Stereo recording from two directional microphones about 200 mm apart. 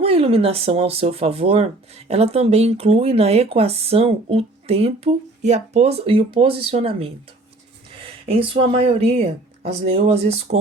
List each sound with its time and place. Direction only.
0.0 s speech: 30° right (ahead or behind)